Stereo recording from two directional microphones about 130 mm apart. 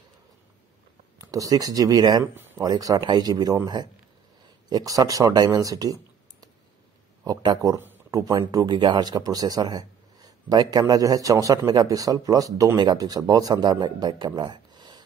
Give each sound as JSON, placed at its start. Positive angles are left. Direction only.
{"t": 1.1, "sound": "speech", "side_deg": -25}
{"t": 7.2, "sound": "speech", "side_deg": -30}